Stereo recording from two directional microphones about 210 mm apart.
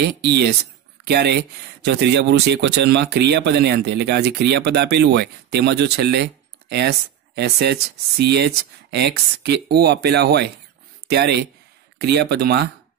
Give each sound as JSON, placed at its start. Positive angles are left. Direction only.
{"t": 0.2, "sound": "speech", "side_deg": -50}